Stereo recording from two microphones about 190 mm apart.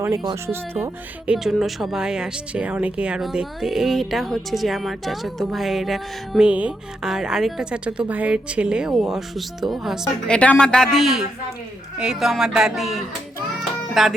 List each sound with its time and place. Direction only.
0.0 s speech: 20° right (ahead or behind)
1.3 s speech: centre (ahead or behind)